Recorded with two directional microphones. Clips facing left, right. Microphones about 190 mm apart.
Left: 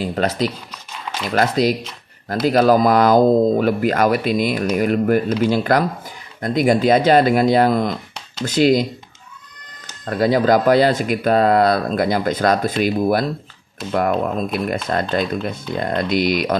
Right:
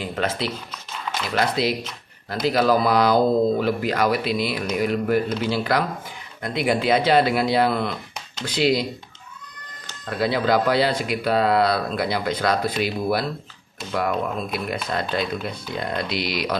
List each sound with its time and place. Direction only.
0.0 s speech: 40° left (ahead or behind)
10.0 s speech: 45° left (ahead or behind)
14.9 s speech: 45° left (ahead or behind)